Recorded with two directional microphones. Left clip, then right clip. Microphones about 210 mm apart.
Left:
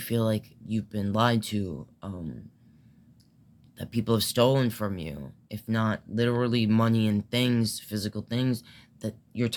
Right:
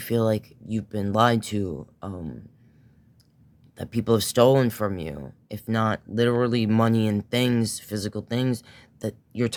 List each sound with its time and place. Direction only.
0.0 s speech: 50° right (ahead or behind)
3.8 s speech: 50° right (ahead or behind)